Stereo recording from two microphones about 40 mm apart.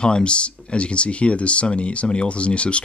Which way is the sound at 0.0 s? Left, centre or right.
Left.